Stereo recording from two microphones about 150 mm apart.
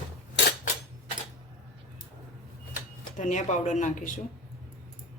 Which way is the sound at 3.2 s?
55° left (ahead or behind).